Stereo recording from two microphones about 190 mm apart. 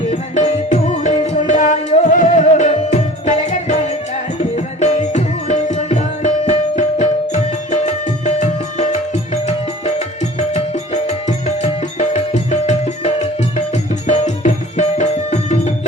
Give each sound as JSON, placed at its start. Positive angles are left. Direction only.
{"t": 0.1, "sound": "music", "side_deg": 40}